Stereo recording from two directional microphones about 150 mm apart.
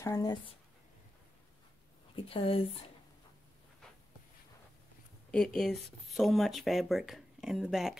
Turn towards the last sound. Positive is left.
turn(degrees=-5)  # may be behind; listen again after turning